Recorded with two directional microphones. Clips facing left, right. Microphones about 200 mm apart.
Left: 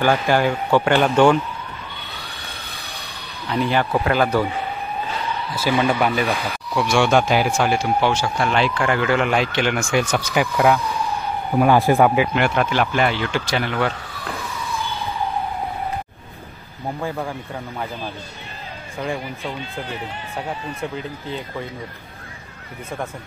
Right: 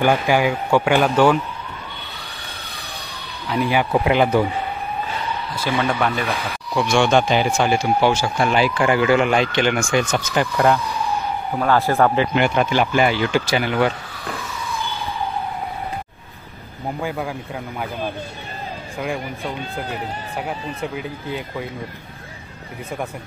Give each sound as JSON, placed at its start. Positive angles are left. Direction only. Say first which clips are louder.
{"t": 0.0, "sound": "speech", "louder": "right 1 dB", "side_deg": -15}
{"t": 3.4, "sound": "speech", "louder": "even", "side_deg": -5}
{"t": 3.9, "sound": "speech", "louder": "right 2 dB", "side_deg": -20}
{"t": 5.6, "sound": "a man's voice", "louder": "left 2 dB", "side_deg": 5}
{"t": 12.4, "sound": "speech", "louder": "right 1 dB", "side_deg": 0}
{"t": 17.0, "sound": "speech", "louder": "right 1 dB", "side_deg": 0}
{"t": 18.9, "sound": "speech", "louder": "even", "side_deg": -5}
{"t": 20.9, "sound": "speech", "louder": "right 1 dB", "side_deg": -10}